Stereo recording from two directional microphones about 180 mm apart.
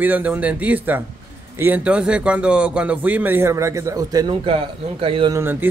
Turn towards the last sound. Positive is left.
turn(degrees=-10)  # may be behind; listen again after turning